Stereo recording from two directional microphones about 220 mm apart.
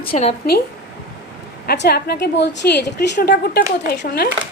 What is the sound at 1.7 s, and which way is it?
A woman's voice, 45° left (ahead or behind).